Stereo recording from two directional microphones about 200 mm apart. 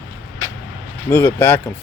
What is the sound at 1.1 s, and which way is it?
Speech, 10° left (ahead or behind).